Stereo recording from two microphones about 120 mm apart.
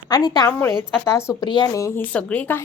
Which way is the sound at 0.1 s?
35° left (ahead or behind).